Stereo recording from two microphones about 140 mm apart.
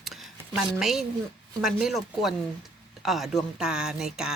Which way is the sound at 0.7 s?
5° right (ahead or behind).